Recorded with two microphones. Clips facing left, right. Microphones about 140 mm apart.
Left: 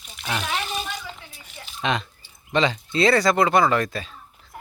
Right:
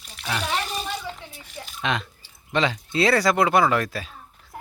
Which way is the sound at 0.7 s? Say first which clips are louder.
Even; 35° right (ahead or behind).